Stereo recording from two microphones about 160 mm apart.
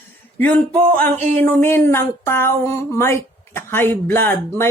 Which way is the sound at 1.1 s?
45° right (ahead or behind).